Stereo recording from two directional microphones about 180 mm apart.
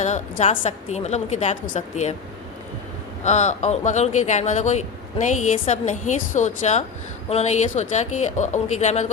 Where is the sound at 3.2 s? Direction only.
40° left (ahead or behind).